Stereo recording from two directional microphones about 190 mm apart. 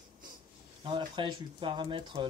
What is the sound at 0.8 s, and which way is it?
Speech, 25° right (ahead or behind).